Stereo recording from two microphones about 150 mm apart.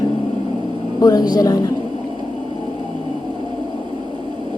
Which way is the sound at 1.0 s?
25° left (ahead or behind).